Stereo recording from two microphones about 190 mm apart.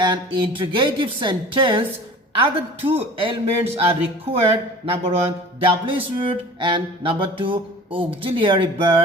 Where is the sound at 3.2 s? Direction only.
30° right (ahead or behind).